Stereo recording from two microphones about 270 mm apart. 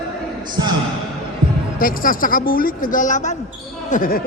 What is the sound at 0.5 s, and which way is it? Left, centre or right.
Speech, centre.